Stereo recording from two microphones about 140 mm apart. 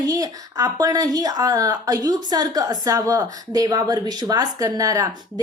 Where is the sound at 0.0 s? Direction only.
25° right (ahead or behind).